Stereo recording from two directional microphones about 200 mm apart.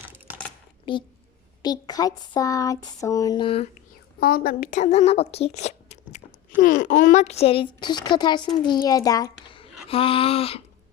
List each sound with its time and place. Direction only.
0.9 s speech: 25° left (ahead or behind)
1.6 s a sound: 20° left (ahead or behind)
4.2 s a child's voice: 45° left (ahead or behind); by 10.6 s 30° left (ahead or behind)